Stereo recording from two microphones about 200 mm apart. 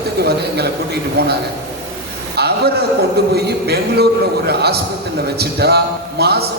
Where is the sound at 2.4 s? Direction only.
55° right (ahead or behind).